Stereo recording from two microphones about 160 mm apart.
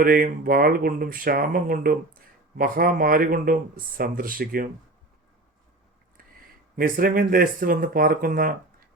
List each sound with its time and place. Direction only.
0.0 s speech: 65° right (ahead or behind)
6.7 s speech: 60° right (ahead or behind)